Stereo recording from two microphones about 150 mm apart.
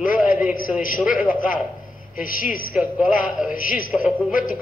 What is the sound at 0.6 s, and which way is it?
Speech, 65° left (ahead or behind).